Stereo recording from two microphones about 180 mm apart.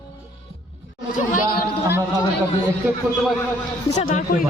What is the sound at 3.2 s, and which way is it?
Speech, 10° left (ahead or behind).